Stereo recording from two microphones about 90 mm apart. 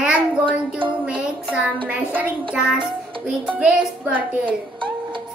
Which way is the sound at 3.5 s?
15° right (ahead or behind).